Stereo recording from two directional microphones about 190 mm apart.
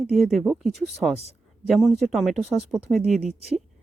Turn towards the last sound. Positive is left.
turn(degrees=-35)  # may be behind; listen again after turning